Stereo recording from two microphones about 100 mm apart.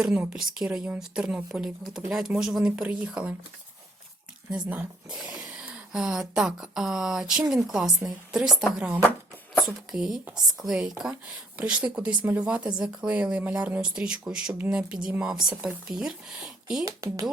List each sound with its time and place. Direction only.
0.0 s speech: 10° right (ahead or behind)
5.0 s a woman's voice: 5° right (ahead or behind)
8.6 s speech: 15° right (ahead or behind)
9.6 s speech: 5° right (ahead or behind)
16.8 s speech: 40° right (ahead or behind)